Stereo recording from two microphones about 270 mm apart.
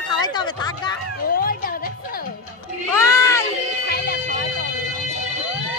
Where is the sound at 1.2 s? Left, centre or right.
Left.